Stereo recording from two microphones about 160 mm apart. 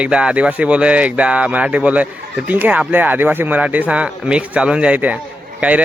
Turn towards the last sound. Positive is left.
turn(degrees=-10)  # may be behind; listen again after turning